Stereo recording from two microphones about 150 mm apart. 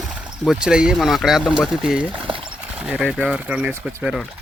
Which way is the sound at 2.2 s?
35° right (ahead or behind).